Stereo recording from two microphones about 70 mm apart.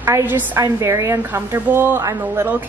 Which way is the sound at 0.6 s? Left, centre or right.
Right.